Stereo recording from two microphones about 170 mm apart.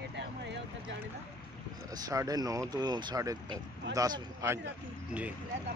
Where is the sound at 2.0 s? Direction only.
20° right (ahead or behind).